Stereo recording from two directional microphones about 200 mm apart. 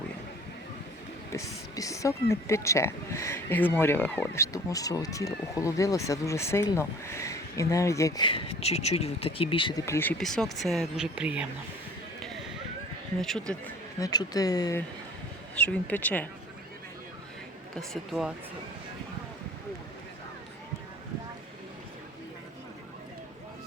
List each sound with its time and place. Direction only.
1.3 s speech: 15° left (ahead or behind); by 11.4 s 5° right (ahead or behind)
13.5 s speech: 5° left (ahead or behind)
14.0 s speech: 20° left (ahead or behind)
15.5 s speech: 5° left (ahead or behind)
17.7 s speech: centre (ahead or behind)